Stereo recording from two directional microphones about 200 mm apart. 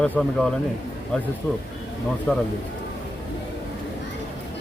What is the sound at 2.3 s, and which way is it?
Speech, 5° left (ahead or behind).